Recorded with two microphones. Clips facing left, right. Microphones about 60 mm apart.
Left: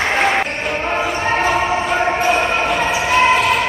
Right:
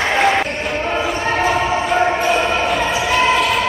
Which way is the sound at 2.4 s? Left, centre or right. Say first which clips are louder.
Even; left.